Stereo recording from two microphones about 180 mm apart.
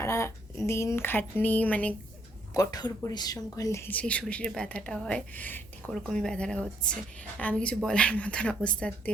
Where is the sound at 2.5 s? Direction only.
20° left (ahead or behind).